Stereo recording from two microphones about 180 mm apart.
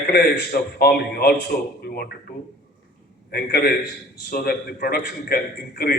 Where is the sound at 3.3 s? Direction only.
60° left (ahead or behind).